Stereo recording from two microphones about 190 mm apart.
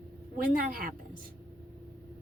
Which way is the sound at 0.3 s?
50° right (ahead or behind).